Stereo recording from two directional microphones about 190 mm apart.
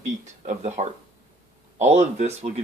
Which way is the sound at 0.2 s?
40° right (ahead or behind).